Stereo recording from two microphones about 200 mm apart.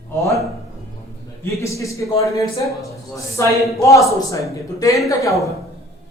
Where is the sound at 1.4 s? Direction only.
15° left (ahead or behind).